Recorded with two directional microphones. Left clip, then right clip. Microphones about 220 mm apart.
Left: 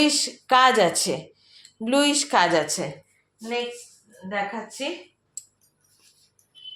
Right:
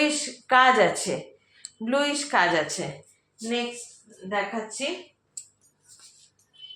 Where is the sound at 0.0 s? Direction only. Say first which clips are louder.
Left 3 dB; 40° left (ahead or behind).